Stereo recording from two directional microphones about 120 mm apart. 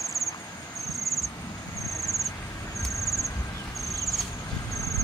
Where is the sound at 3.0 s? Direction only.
25° left (ahead or behind).